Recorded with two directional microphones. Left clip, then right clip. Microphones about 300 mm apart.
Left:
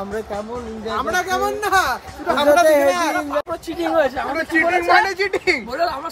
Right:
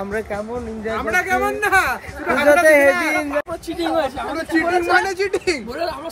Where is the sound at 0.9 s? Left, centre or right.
Centre.